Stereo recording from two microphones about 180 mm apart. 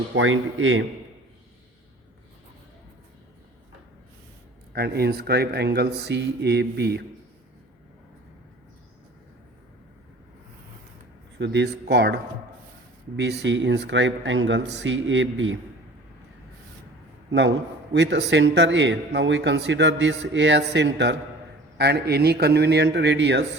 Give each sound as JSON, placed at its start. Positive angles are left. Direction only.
{"t": 0.2, "sound": "speech", "side_deg": -90}
{"t": 4.7, "sound": "speech", "side_deg": -60}
{"t": 11.3, "sound": "a man's voice", "side_deg": -75}
{"t": 13.4, "sound": "speech", "side_deg": -85}
{"t": 17.9, "sound": "speech", "side_deg": -75}
{"t": 21.8, "sound": "a man's voice", "side_deg": -65}